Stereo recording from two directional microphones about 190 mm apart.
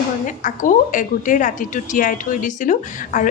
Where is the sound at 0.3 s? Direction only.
45° left (ahead or behind).